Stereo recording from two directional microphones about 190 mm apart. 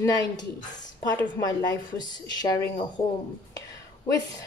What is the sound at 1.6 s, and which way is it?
Speech, 20° left (ahead or behind).